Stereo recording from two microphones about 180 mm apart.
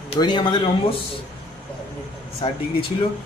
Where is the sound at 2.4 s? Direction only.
30° left (ahead or behind).